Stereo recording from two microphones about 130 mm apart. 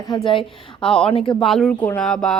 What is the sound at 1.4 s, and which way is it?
Speech, centre (ahead or behind).